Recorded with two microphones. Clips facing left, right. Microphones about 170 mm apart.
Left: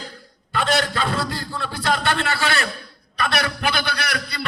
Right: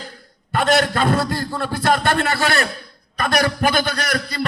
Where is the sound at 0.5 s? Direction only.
50° right (ahead or behind).